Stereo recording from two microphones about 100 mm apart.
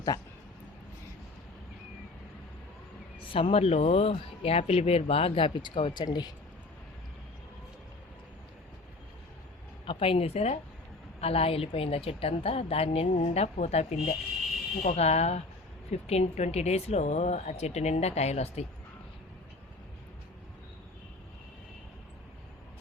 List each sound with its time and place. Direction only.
0.1 s speech: 30° left (ahead or behind)
3.3 s speech: 75° left (ahead or behind); by 6.3 s 45° left (ahead or behind)
9.8 s a woman's voice: 65° left (ahead or behind); by 18.6 s 90° left